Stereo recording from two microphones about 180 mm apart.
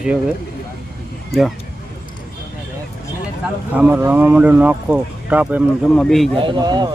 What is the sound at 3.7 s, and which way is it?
Speech, 10° right (ahead or behind).